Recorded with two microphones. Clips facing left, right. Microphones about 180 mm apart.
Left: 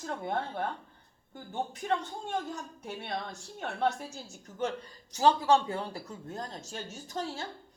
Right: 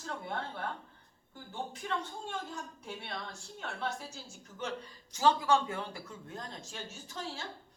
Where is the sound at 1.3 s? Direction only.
50° left (ahead or behind).